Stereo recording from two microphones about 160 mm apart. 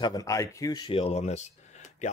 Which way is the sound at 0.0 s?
20° left (ahead or behind).